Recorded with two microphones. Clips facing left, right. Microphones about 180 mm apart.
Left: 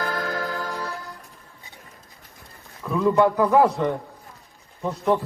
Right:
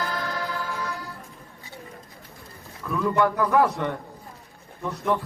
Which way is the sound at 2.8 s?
15° left (ahead or behind).